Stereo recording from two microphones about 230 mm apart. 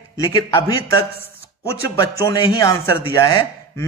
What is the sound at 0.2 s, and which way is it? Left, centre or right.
A man's voice, centre.